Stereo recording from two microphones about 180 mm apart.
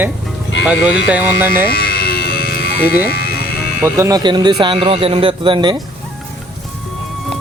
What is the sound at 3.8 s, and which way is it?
Speech, 15° right (ahead or behind).